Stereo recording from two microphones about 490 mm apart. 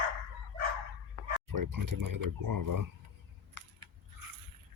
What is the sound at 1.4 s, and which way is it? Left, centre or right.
Speech, right.